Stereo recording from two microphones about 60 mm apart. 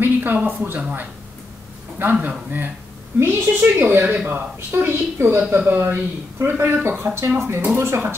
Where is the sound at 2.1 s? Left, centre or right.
Right.